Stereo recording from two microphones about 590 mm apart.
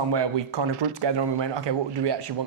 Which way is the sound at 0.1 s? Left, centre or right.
Right.